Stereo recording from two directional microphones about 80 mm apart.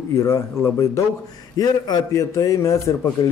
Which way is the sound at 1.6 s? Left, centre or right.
Left.